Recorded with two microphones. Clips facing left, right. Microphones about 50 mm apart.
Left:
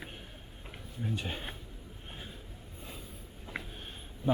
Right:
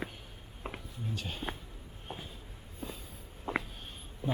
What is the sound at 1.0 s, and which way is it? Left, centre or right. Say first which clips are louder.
Speech: left 3 dB; left.